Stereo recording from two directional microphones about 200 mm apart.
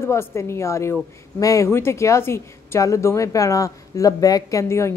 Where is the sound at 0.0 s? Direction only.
15° left (ahead or behind).